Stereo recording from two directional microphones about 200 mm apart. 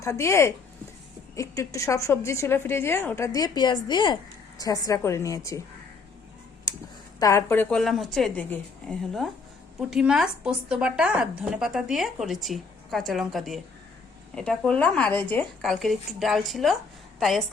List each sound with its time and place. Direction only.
0.0 s a woman's voice: 15° left (ahead or behind)
6.7 s a sound: 20° left (ahead or behind)
7.2 s a woman's voice: 15° left (ahead or behind)